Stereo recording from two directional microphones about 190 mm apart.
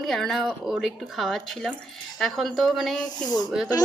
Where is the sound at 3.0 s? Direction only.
20° left (ahead or behind).